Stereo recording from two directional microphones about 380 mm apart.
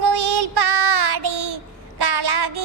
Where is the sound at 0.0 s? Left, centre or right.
Right.